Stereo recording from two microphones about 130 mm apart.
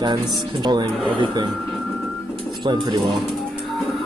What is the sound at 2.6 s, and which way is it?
Speech, 35° right (ahead or behind).